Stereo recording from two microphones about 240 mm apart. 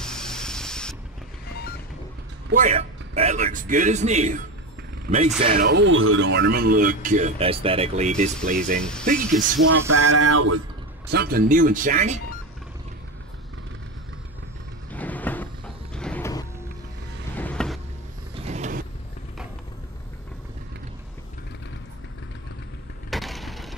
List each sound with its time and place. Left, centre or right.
0.0 s spray: centre
2.5 s speech: right
5.1 s speech: right
8.7 s speech: centre
9.7 s a sound: right
11.1 s speech: right
14.9 s vehicle: centre
15.9 s music: centre
17.4 s vehicle: centre
18.3 s mechanisms: right
23.0 s a sound: centre